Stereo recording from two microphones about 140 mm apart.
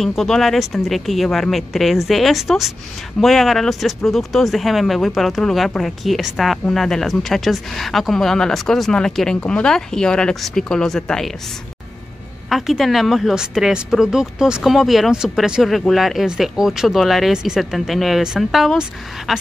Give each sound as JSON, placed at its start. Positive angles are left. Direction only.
{"t": 0.0, "sound": "speech", "side_deg": 0}
{"t": 12.4, "sound": "speech", "side_deg": 0}